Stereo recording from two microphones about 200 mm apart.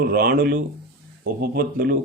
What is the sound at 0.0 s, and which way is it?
Speech, 45° right (ahead or behind).